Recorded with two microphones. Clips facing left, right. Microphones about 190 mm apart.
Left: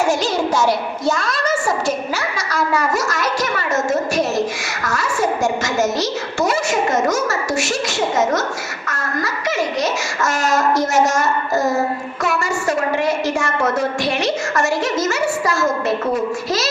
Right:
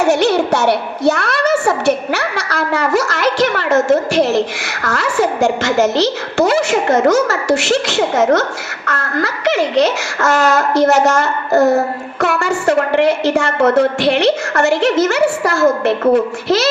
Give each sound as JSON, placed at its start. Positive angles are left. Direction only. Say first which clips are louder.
{"t": 0.0, "sound": "a woman's voice", "louder": "right 5 dB", "side_deg": -65}